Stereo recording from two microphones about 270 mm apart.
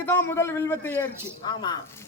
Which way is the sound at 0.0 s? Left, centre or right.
Centre.